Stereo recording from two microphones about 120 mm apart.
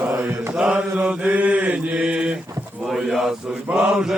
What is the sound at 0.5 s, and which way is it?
Mantra, 10° right (ahead or behind).